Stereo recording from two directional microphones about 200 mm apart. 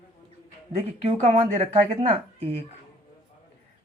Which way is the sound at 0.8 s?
30° right (ahead or behind).